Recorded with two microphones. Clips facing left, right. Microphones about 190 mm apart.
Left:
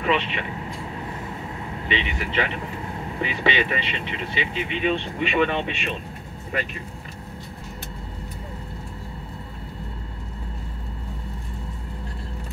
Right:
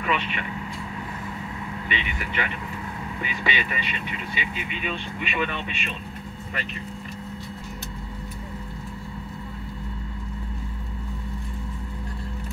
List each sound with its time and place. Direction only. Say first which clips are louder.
0.0 s speech: left 4 dB; 25° left (ahead or behind)
1.9 s speech: left 6 dB; 25° left (ahead or behind)